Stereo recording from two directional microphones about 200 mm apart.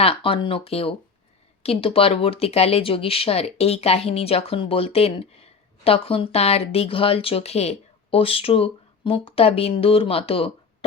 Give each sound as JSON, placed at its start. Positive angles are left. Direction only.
{"t": 0.0, "sound": "speech", "side_deg": 25}